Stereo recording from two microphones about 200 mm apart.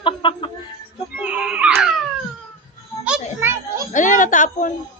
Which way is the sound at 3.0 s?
10° right (ahead or behind).